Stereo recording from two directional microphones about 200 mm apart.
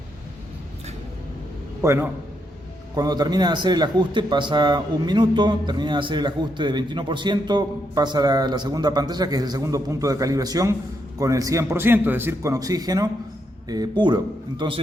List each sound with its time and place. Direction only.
1.8 s a man's voice: 15° right (ahead or behind)